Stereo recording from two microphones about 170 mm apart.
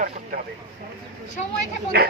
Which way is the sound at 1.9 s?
70° right (ahead or behind).